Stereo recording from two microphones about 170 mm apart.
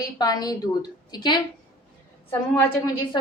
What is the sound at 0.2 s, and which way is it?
A woman's voice, 25° left (ahead or behind).